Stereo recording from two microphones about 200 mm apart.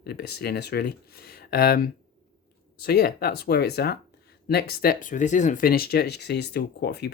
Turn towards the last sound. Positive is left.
turn(degrees=55)  # may be behind; listen again after turning